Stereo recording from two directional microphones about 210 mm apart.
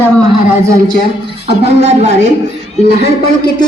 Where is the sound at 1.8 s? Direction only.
30° right (ahead or behind).